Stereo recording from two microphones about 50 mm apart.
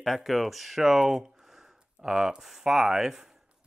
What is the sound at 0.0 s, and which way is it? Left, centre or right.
Speech, centre.